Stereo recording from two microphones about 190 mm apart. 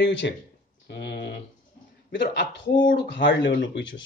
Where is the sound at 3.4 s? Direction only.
75° left (ahead or behind).